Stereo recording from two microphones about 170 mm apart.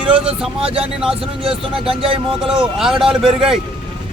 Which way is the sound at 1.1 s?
35° right (ahead or behind).